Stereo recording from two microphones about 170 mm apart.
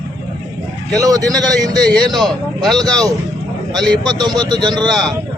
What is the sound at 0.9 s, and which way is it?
Speech, 20° right (ahead or behind).